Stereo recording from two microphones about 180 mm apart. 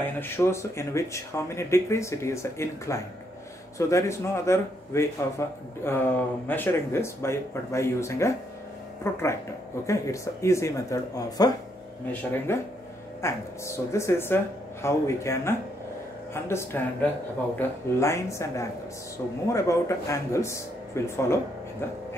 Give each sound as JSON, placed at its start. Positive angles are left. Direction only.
{"t": 0.2, "sound": "a man's voice", "side_deg": 15}